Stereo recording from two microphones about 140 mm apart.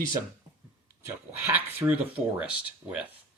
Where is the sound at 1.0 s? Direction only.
15° right (ahead or behind).